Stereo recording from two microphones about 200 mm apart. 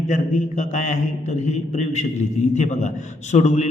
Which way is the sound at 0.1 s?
40° left (ahead or behind).